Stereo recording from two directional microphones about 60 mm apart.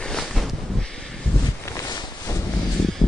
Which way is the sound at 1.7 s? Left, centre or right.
Left.